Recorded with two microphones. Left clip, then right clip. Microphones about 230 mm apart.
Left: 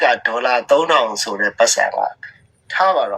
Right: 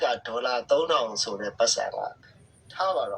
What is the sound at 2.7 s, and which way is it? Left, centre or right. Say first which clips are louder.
Speech: left 11 dB; left.